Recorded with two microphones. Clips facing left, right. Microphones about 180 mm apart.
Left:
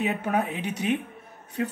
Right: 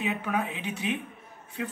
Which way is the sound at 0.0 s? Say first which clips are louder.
Left 4 dB; 40° left (ahead or behind).